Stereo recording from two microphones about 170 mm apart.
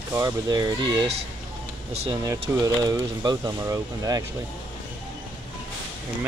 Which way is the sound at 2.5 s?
20° right (ahead or behind).